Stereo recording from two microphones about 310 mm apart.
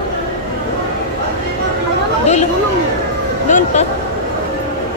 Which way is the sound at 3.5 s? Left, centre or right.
Left.